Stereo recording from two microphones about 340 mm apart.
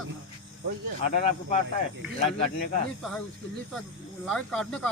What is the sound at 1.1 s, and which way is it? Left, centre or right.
Speech, centre.